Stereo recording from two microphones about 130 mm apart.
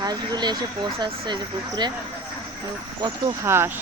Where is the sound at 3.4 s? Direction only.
20° right (ahead or behind).